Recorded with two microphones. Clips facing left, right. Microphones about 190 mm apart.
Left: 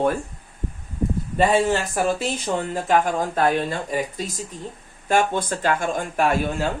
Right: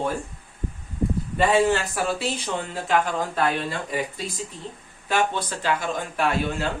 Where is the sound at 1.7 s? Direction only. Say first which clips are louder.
Left 3 dB; 45° left (ahead or behind).